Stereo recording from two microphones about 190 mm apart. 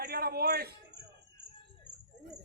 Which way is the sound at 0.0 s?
55° right (ahead or behind).